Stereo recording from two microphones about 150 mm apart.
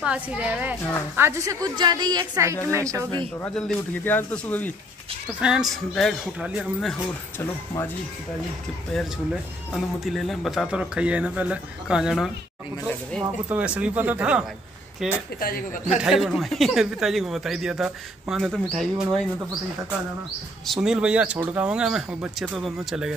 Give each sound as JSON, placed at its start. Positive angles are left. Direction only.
{"t": 0.0, "sound": "a woman's voice", "side_deg": -10}
{"t": 3.4, "sound": "speech", "side_deg": 5}
{"t": 5.4, "sound": "speech", "side_deg": -5}
{"t": 7.3, "sound": "speech", "side_deg": 15}
{"t": 8.9, "sound": "speech", "side_deg": 5}
{"t": 13.5, "sound": "speech", "side_deg": -10}
{"t": 15.4, "sound": "speech", "side_deg": 65}
{"t": 16.0, "sound": "speech", "side_deg": -5}
{"t": 20.6, "sound": "speech", "side_deg": 0}